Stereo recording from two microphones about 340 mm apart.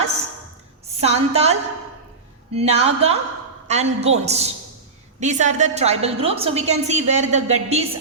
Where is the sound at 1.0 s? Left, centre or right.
Centre.